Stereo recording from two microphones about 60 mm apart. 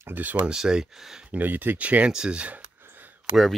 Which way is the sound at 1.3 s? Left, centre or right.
Right.